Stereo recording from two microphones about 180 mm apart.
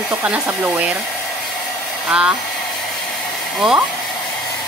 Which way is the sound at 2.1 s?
5° right (ahead or behind).